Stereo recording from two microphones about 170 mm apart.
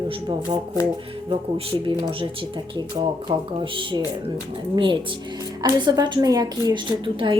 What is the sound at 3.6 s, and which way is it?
A woman's voice, 30° right (ahead or behind).